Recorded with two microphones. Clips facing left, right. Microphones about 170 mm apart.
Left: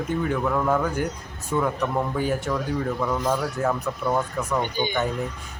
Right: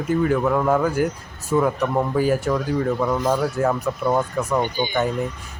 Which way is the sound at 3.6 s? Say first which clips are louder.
Right 4 dB; 10° right (ahead or behind).